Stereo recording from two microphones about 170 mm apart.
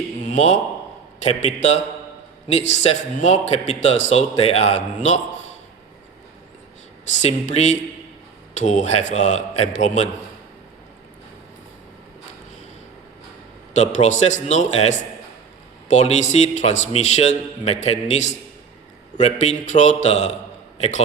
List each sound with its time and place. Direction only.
0.2 s a sound: 45° left (ahead or behind)
1.2 s a man's voice: 40° left (ahead or behind)
7.2 s a man's voice: 40° left (ahead or behind)
13.7 s a man's voice: 45° left (ahead or behind)